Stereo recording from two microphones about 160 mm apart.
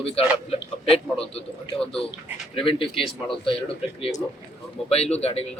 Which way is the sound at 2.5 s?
35° left (ahead or behind).